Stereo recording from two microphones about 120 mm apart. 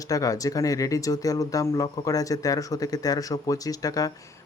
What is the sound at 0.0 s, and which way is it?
Speech, 30° left (ahead or behind).